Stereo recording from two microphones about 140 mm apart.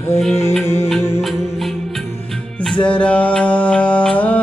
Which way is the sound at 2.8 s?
10° left (ahead or behind).